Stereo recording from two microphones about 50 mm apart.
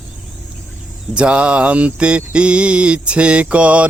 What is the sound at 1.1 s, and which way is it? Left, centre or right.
Mantra, right.